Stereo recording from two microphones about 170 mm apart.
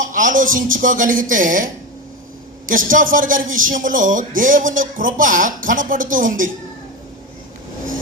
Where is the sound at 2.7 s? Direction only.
50° right (ahead or behind).